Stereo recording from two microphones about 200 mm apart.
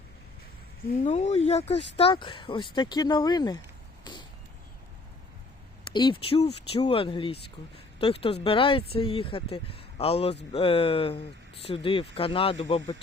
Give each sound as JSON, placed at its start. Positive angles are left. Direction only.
{"t": 1.0, "sound": "speech", "side_deg": 30}
{"t": 4.0, "sound": "vehicle", "side_deg": 20}
{"t": 5.9, "sound": "speech", "side_deg": 25}